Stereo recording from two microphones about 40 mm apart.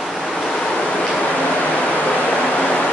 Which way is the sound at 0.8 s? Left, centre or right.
Left.